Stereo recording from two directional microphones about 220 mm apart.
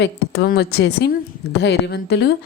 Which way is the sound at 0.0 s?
45° left (ahead or behind).